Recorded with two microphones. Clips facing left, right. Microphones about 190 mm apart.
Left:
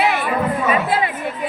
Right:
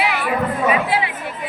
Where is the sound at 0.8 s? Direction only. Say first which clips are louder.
Left 1 dB; 45° left (ahead or behind).